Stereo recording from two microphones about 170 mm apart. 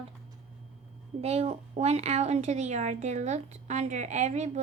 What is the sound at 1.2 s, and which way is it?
A woman's voice, 35° right (ahead or behind).